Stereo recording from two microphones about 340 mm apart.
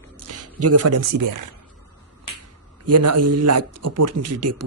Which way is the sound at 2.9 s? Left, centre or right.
Right.